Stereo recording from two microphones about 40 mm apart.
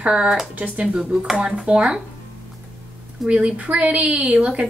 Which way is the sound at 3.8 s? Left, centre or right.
Right.